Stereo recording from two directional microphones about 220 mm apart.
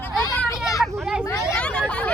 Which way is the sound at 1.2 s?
15° left (ahead or behind).